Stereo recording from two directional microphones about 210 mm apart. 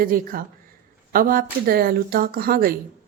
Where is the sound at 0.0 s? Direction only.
45° right (ahead or behind).